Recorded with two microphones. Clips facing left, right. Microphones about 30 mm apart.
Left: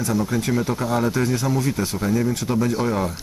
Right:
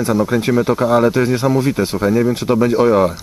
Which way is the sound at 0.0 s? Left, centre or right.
Right.